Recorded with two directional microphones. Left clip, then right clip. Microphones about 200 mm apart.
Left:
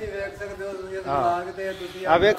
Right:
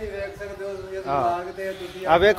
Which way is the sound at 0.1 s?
Centre (ahead or behind).